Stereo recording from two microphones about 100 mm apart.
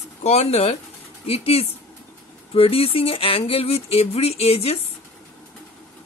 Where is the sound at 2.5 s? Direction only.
75° left (ahead or behind); by 4.7 s 90° left.